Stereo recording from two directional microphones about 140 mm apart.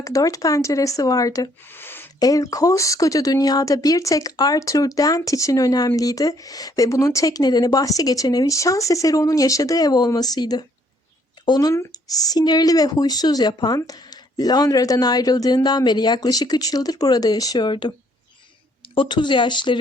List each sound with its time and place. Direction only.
0.0 s speech: 25° left (ahead or behind)
2.1 s speech: 25° left (ahead or behind)
18.9 s speech: 35° left (ahead or behind)